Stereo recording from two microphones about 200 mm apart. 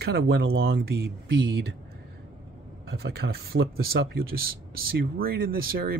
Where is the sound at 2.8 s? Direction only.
55° right (ahead or behind).